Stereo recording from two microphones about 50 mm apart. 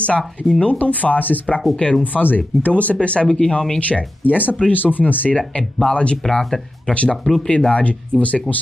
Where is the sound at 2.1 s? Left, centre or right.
Left.